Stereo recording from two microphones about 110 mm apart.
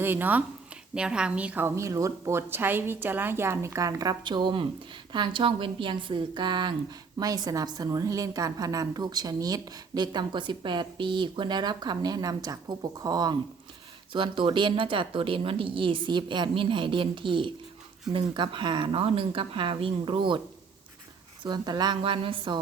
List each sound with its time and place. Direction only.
0.0 s a woman's voice: 20° right (ahead or behind)
1.6 s a woman's voice: 25° right (ahead or behind)
14.1 s speech: 50° right (ahead or behind)
21.4 s speech: 40° right (ahead or behind)